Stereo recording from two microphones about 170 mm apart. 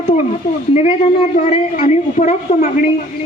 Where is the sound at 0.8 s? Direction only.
40° left (ahead or behind).